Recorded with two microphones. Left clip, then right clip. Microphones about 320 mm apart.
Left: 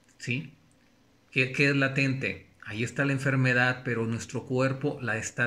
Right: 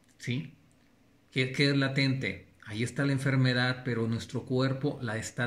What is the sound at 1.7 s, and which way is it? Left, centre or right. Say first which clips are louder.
Speech: left 3 dB; left.